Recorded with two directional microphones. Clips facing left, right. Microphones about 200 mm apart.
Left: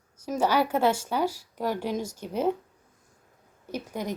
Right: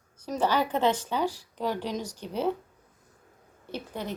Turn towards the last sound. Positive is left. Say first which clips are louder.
# left 3 dB
turn(degrees=10)  # may be behind; listen again after turning